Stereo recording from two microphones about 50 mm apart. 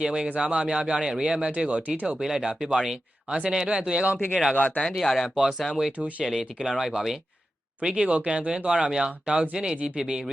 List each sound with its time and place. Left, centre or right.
0.0 s speech: centre
1.4 s speech: right
2.1 s speech: centre
3.2 s speech: right
4.5 s speech: left
4.8 s speech: centre
6.0 s speech: right
6.6 s speech: centre